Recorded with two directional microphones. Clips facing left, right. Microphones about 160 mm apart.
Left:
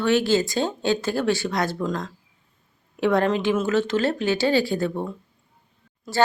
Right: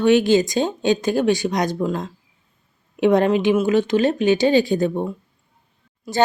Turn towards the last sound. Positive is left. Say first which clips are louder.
# right 2 dB
turn(degrees=-20)  # may be behind; listen again after turning